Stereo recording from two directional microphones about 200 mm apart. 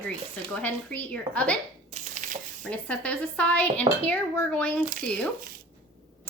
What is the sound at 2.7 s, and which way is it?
A woman's voice, 5° left (ahead or behind).